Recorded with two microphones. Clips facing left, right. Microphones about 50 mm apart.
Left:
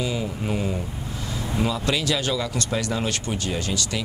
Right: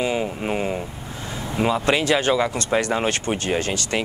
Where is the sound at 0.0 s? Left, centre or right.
Right.